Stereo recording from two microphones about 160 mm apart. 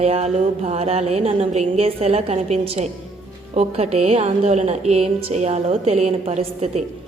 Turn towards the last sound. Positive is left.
turn(degrees=-45)  # may be behind; listen again after turning